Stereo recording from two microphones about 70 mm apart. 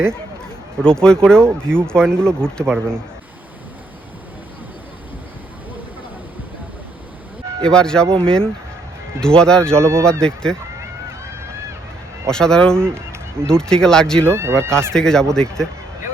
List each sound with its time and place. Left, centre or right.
0.8 s speech: centre
7.6 s speech: centre
9.8 s speech: right
10.1 s speech: centre
12.3 s speech: centre
14.3 s speech: right
14.9 s speech: centre